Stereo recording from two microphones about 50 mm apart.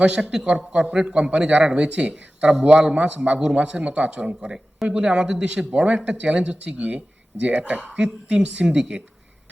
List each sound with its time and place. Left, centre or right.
0.0 s a man's voice: centre